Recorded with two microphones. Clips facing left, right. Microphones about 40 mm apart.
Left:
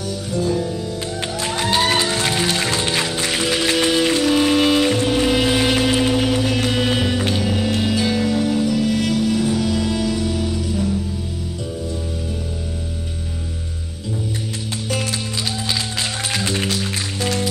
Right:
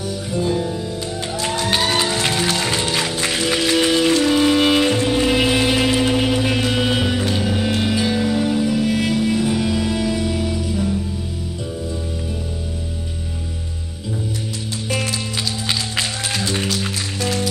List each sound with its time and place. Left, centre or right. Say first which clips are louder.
0.3 s music: even; centre
2.5 s music: even; centre
4.6 s music: even; centre
5.0 s music: even; centre
5.6 s vehicle: even; centre
6.1 s music: even; centre
10.4 s music: even; centre